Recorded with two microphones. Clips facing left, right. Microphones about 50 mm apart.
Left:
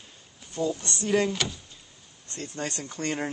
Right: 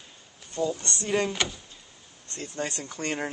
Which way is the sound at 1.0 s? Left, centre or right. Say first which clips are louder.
Left 2 dB; centre.